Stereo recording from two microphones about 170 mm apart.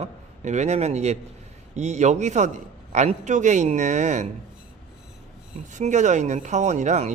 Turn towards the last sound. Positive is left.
turn(degrees=-45)  # may be behind; listen again after turning